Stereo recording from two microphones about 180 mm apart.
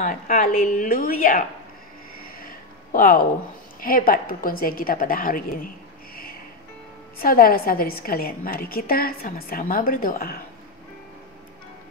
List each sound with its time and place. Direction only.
0.0 s a woman's voice: 45° left (ahead or behind)
2.3 s a sound: 50° left (ahead or behind)
3.8 s a woman's voice: 50° left (ahead or behind)
7.2 s a woman's voice: 55° left (ahead or behind)